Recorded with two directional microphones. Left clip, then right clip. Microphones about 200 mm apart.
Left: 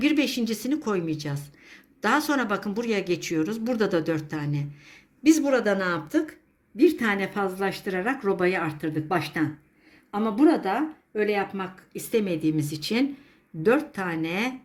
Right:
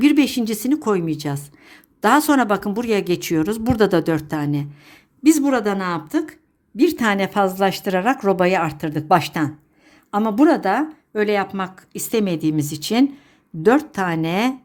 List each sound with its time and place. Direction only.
0.0 s a woman's voice: 50° right (ahead or behind)